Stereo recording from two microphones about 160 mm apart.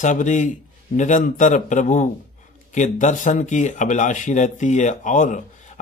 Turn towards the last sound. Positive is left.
turn(degrees=50)  # may be behind; listen again after turning